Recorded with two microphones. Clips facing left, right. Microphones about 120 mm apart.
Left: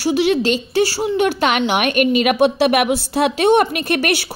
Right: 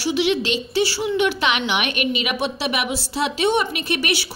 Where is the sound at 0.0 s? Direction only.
45° left (ahead or behind).